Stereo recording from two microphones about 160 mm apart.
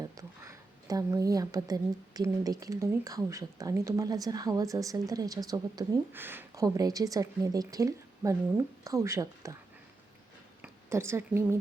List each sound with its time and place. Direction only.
0.0 s speech: 20° right (ahead or behind)
10.6 s a woman's voice: 15° right (ahead or behind)